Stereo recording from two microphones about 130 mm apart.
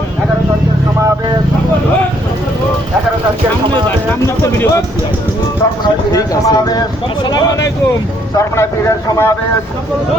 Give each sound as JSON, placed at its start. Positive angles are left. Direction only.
{"t": 4.4, "sound": "a sound", "side_deg": 15}
{"t": 6.1, "sound": "speech", "side_deg": 25}
{"t": 8.4, "sound": "speech", "side_deg": 20}